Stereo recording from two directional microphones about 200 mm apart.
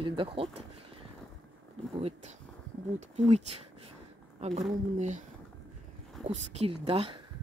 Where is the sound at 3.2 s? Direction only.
35° right (ahead or behind).